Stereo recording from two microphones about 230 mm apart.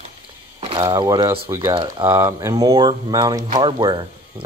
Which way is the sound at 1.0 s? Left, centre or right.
Centre.